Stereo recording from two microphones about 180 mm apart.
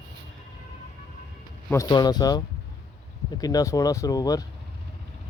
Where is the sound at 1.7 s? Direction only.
20° left (ahead or behind).